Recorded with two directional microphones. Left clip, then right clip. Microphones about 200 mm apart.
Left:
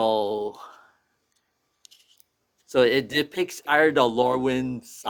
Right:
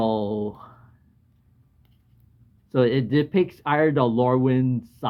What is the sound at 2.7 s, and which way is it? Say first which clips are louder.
Speech: left 1 dB; 35° left (ahead or behind).